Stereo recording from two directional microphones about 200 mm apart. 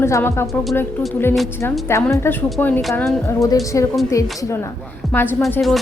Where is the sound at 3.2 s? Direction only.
15° left (ahead or behind).